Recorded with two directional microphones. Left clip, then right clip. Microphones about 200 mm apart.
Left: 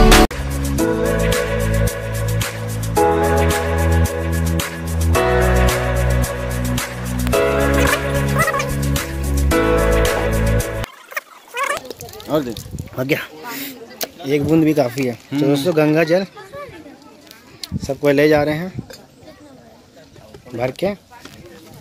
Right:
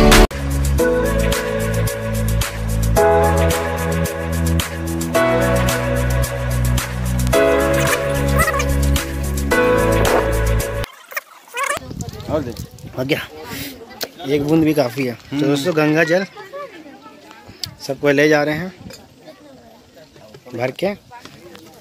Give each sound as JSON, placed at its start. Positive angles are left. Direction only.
{"t": 0.1, "sound": "music", "side_deg": 0}
{"t": 12.3, "sound": "a sound", "side_deg": 35}
{"t": 12.9, "sound": "a sound", "side_deg": 0}
{"t": 14.3, "sound": "speech", "side_deg": 0}
{"t": 17.6, "sound": "speech", "side_deg": 0}
{"t": 20.5, "sound": "speech", "side_deg": 5}